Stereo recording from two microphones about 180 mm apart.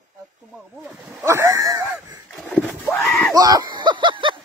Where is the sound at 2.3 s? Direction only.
Centre (ahead or behind).